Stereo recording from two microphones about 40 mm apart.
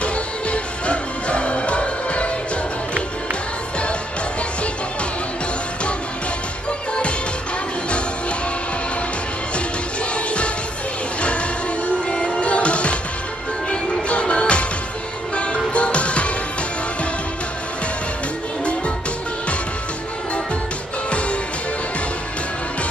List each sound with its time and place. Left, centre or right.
0.0 s music: left
10.1 s music: left
12.1 s music: left